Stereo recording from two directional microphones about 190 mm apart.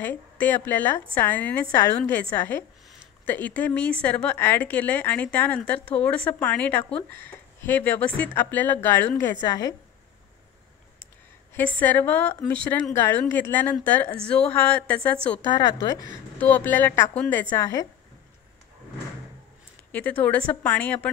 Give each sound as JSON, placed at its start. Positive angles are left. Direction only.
{"t": 0.0, "sound": "a woman's voice", "side_deg": 10}
{"t": 11.5, "sound": "a woman's voice", "side_deg": 10}
{"t": 15.5, "sound": "speech", "side_deg": 20}
{"t": 16.3, "sound": "a woman's voice", "side_deg": 10}
{"t": 19.9, "sound": "a woman's voice", "side_deg": 10}